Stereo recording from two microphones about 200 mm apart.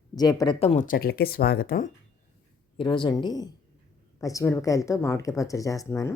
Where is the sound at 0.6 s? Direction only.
35° left (ahead or behind).